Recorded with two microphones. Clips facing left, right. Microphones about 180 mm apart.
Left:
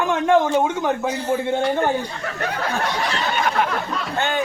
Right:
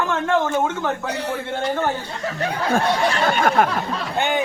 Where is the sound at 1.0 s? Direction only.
70° right (ahead or behind).